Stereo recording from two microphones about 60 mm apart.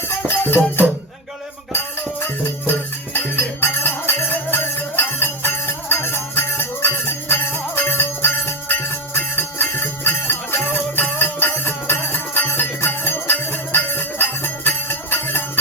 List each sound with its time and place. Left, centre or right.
0.4 s music: left
3.1 s music: left